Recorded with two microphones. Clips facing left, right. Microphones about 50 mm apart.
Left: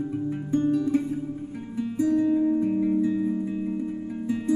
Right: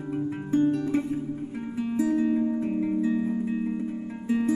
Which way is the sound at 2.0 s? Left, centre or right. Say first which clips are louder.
Left 3 dB; centre.